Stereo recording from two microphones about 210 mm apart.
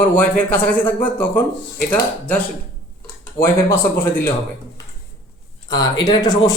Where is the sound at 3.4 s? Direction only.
25° left (ahead or behind).